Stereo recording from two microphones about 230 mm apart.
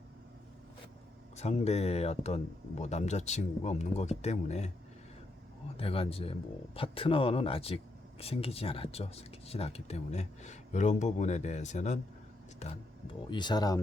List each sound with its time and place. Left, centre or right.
1.4 s speech: left
5.7 s speech: left
13.3 s speech: centre